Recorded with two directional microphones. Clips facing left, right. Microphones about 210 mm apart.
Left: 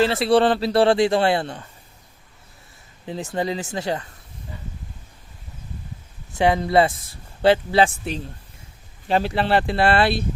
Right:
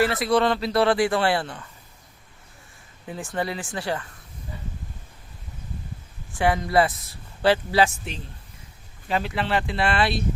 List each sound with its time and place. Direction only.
0.0 s speech: 30° left (ahead or behind)
3.3 s speech: 20° left (ahead or behind)
6.3 s speech: 25° left (ahead or behind)